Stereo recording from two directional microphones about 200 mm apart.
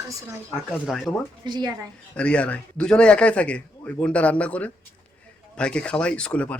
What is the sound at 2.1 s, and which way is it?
A man's voice, 5° left (ahead or behind).